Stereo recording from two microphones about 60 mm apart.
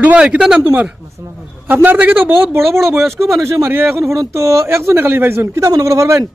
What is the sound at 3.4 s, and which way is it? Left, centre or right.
A man's voice, right.